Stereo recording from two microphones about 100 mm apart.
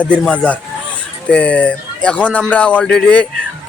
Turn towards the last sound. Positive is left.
turn(degrees=10)  # may be behind; listen again after turning